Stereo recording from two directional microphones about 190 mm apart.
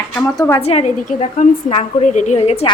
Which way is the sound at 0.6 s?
30° left (ahead or behind).